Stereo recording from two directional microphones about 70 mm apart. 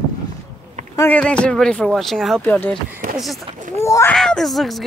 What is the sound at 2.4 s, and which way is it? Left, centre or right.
Speech, left.